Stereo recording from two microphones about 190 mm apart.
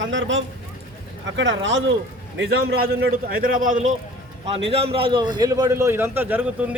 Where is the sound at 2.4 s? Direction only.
55° right (ahead or behind).